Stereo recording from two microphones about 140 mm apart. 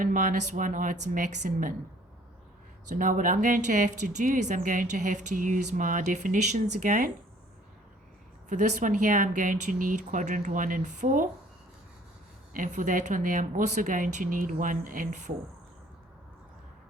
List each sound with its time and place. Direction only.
0.0 s a woman's voice: 70° right (ahead or behind)
2.9 s a woman's voice: 70° right (ahead or behind)
8.4 s a woman's voice: 65° right (ahead or behind)
12.5 s a woman's voice: 65° right (ahead or behind)